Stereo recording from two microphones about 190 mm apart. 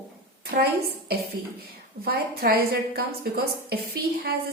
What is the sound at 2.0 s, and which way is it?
A woman's voice, 55° right (ahead or behind).